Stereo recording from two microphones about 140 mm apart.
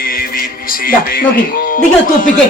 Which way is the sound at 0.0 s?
90° left.